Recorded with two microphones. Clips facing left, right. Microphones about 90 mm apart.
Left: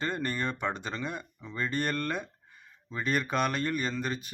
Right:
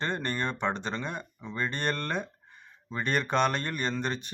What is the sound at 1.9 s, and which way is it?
Speech, 10° left (ahead or behind).